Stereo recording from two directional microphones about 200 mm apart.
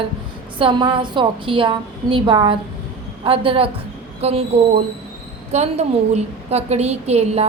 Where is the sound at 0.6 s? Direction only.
20° right (ahead or behind).